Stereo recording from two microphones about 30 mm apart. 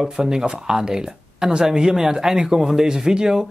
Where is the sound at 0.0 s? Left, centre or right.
Centre.